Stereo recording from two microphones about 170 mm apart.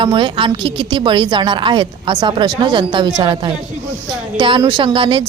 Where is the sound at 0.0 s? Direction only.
30° right (ahead or behind).